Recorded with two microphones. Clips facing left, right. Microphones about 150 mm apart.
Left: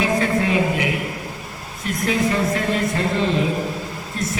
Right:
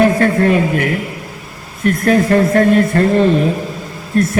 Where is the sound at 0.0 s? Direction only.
55° right (ahead or behind).